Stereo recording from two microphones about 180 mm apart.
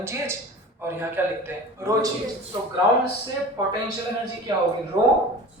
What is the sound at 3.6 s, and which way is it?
Speech, 20° right (ahead or behind).